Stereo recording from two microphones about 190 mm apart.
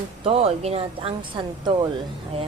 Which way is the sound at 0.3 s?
30° right (ahead or behind).